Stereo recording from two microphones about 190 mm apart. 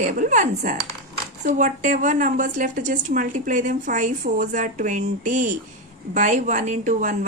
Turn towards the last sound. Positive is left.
turn(degrees=-40)  # may be behind; listen again after turning